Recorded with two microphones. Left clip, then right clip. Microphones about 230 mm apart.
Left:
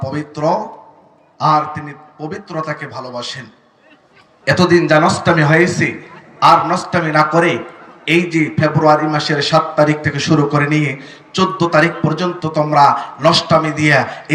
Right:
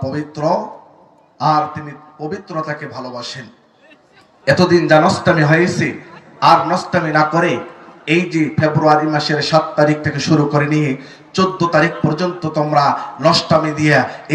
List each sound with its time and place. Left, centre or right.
0.0 s a man's voice: centre
4.4 s a man's voice: centre